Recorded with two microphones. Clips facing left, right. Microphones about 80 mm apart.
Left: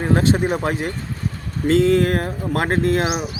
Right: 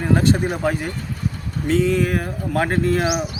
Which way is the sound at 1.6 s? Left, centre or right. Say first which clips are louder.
Left 3 dB; left.